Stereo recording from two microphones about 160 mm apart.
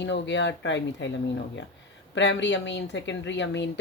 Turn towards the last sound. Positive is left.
turn(degrees=90)